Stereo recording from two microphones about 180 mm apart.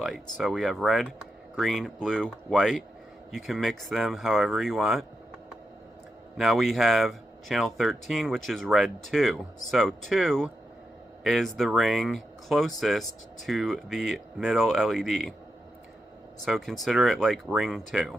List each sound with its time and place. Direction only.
0.0 s speech: centre (ahead or behind)
6.3 s speech: centre (ahead or behind)
16.5 s speech: centre (ahead or behind)